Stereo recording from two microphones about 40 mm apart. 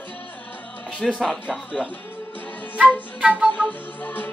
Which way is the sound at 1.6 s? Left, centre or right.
Left.